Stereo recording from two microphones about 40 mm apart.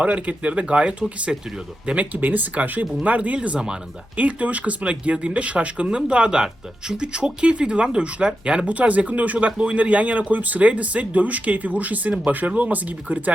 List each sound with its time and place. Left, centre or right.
0.0 s speech: right
2.0 s speech: right